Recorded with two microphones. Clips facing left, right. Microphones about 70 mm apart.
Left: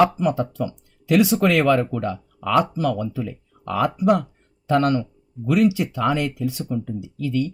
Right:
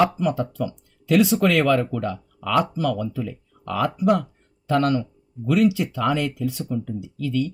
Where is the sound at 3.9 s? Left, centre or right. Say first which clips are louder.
Left 1 dB; centre.